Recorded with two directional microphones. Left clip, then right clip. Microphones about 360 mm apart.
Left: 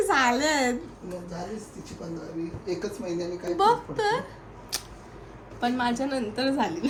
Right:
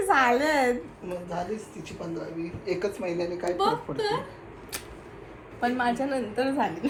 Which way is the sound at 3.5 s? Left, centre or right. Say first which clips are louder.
Left 6 dB; centre.